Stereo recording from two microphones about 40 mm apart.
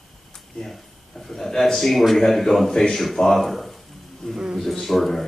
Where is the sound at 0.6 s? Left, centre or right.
Centre.